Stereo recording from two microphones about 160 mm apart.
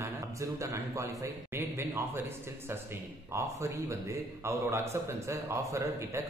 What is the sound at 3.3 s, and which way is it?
A man's voice, 20° right (ahead or behind).